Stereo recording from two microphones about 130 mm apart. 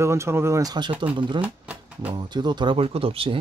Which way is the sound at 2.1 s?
35° right (ahead or behind).